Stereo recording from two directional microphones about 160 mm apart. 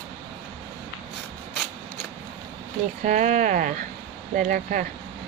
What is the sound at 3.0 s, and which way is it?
Speech, 50° right (ahead or behind).